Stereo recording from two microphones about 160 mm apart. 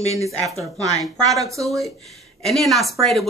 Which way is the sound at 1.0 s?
20° right (ahead or behind).